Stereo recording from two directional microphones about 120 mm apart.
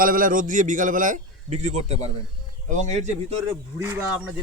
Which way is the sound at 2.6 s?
90° right.